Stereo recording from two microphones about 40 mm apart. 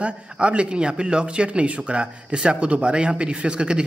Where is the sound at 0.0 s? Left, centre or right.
Right.